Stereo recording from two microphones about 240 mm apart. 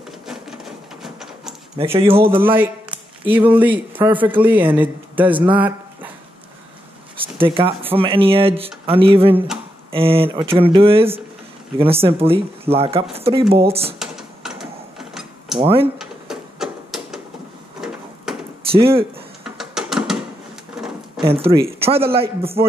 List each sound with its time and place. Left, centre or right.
0.3 s a sound: centre
2.0 s speech: right
2.4 s speech: centre
7.2 s a sound: right
7.9 s speech: right
13.9 s a sound: centre
15.6 s speech: right
16.0 s music: centre
17.7 s a sound: centre
18.7 s speech: right
19.4 s music: centre
21.2 s speech: right